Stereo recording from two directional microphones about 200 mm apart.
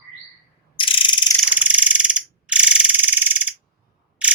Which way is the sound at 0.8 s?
25° left (ahead or behind).